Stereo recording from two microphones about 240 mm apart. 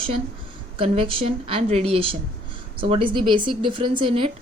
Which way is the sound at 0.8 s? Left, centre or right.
Right.